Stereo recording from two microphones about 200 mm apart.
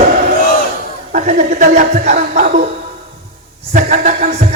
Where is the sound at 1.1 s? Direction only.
40° right (ahead or behind).